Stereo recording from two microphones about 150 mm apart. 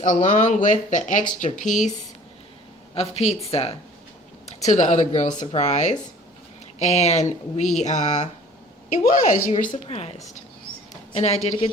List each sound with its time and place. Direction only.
0.0 s a woman's voice: 60° left (ahead or behind)
2.9 s speech: 45° left (ahead or behind)
4.4 s a woman's voice: 50° left (ahead or behind)